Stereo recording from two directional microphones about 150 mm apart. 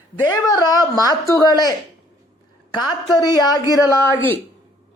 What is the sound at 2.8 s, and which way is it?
A woman's voice, 30° left (ahead or behind).